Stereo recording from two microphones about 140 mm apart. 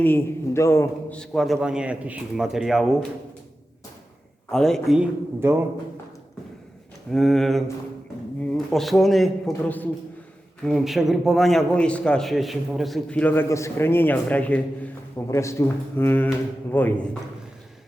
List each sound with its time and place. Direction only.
0.0 s a man's voice: 15° left (ahead or behind)
1.1 s a man's voice: 5° left (ahead or behind)
4.5 s a man's voice: 5° left (ahead or behind)
4.9 s speech: 15° right (ahead or behind)
7.1 s a man's voice: centre (ahead or behind)
9.6 s a man's voice: 10° left (ahead or behind)
10.6 s a man's voice: centre (ahead or behind)
15.3 s a man's voice: 20° left (ahead or behind)